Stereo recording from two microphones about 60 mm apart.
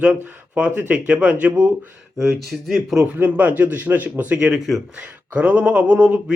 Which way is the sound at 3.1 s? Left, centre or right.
Right.